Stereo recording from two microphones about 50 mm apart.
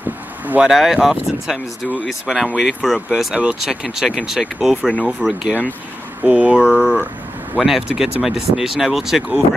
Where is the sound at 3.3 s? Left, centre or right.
Right.